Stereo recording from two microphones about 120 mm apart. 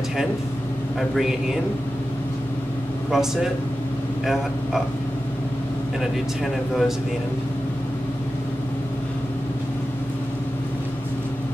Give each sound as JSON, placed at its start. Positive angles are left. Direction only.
{"t": 3.1, "sound": "a man's voice", "side_deg": -5}
{"t": 6.4, "sound": "a man's voice", "side_deg": 0}